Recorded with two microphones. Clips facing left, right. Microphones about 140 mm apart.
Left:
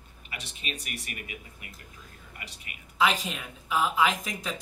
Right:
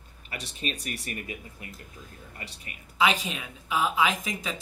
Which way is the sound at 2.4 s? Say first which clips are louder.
Right 3 dB; 35° right (ahead or behind).